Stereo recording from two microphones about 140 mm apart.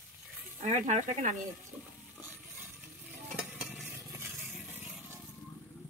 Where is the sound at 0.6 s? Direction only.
60° right (ahead or behind).